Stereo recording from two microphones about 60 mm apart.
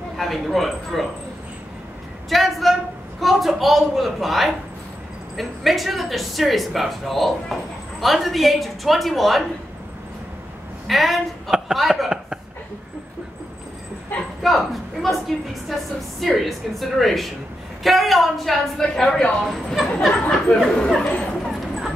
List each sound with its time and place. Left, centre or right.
0.2 s a woman's voice: centre
2.2 s a sound: centre
3.2 s a woman's voice: centre
10.9 s a woman's voice: centre
14.4 s a woman's voice: centre
21.5 s a sound: centre